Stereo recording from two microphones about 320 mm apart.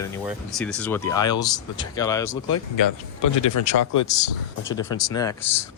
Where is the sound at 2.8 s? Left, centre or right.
Left.